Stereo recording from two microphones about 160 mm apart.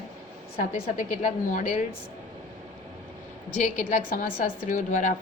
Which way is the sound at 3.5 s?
50° left (ahead or behind).